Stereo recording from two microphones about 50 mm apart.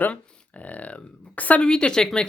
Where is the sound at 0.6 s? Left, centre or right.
Left.